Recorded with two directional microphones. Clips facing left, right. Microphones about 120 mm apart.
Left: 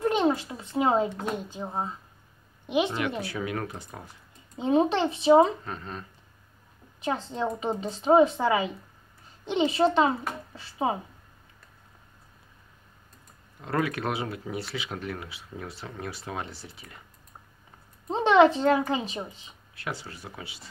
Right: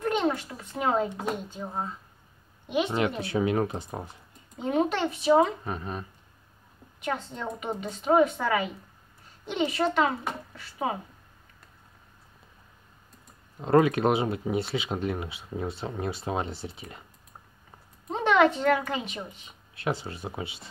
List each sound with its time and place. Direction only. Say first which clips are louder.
0.0 s a sound: left 2 dB; 30° left (ahead or behind)
0.5 s a child's voice: left 3 dB; 20° left (ahead or behind)
3.2 s speech: right 6 dB; 25° right (ahead or behind)
4.6 s a child's voice: left 3 dB; 25° left (ahead or behind)
5.6 s speech: right 3 dB; 15° right (ahead or behind)
7.0 s a child's voice: left 3 dB; 30° left (ahead or behind)
13.6 s speech: right 8 dB; 25° right (ahead or behind)
18.1 s a child's voice: left 3 dB; 25° left (ahead or behind)
19.7 s speech: right 6 dB; 20° right (ahead or behind)